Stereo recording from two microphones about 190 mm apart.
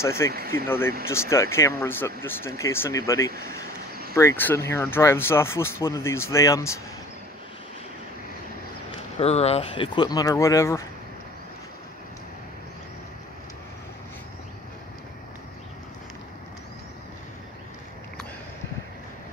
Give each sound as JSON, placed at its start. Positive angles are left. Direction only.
{"t": 0.0, "sound": "speech", "side_deg": 15}
{"t": 9.2, "sound": "speech", "side_deg": 35}